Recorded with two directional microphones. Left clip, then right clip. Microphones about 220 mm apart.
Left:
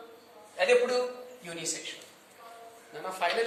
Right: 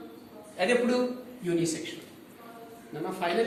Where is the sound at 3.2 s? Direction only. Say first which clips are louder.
Left 1 dB; 30° left (ahead or behind).